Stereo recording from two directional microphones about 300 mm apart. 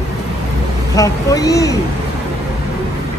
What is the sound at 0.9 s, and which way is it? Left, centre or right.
Speech, centre.